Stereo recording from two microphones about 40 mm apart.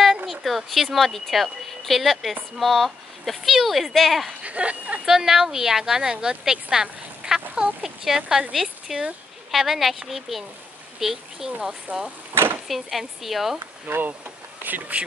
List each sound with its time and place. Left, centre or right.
0.3 s speech: centre
4.3 s speech: right
5.0 s a woman's voice: centre
8.9 s speech: centre
12.6 s speech: centre
13.9 s speech: right